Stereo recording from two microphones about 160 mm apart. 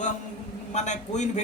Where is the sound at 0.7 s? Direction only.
45° left (ahead or behind).